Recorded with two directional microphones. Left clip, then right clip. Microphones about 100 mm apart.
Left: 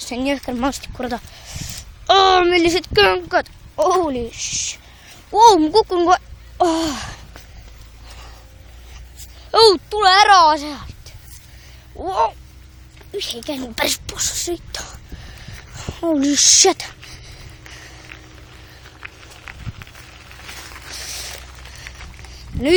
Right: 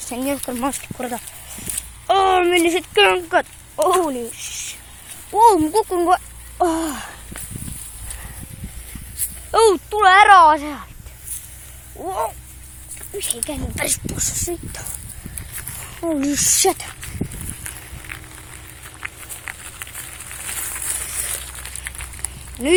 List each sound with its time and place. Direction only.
0.0 s speech: 60° left (ahead or behind)
2.0 s speech: 80° left; by 3.1 s 60° left (ahead or behind)
3.2 s speech: 25° left (ahead or behind)
4.1 s speech: 80° left
9.5 s a child's voice: 75° left (ahead or behind)
9.9 s a woman's voice: 40° left (ahead or behind)
11.9 s a child's voice: 70° left (ahead or behind)
16.0 s a child's voice: 80° left
18.1 s vehicle: 25° right (ahead or behind)
18.9 s a sound: 15° right (ahead or behind)